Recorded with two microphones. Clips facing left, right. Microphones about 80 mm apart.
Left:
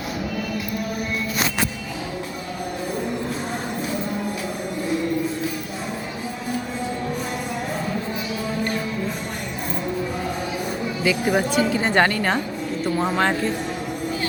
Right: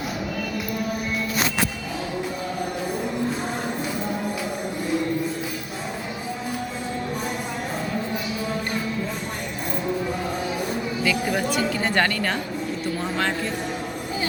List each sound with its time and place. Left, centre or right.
11.0 s a woman's voice: left